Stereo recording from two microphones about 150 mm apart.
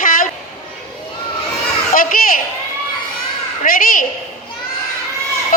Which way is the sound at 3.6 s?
70° left (ahead or behind).